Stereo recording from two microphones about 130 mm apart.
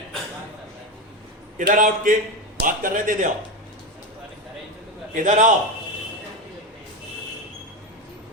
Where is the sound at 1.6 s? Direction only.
90° right.